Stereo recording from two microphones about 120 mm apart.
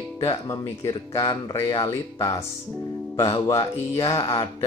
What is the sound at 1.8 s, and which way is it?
Speech, 30° left (ahead or behind).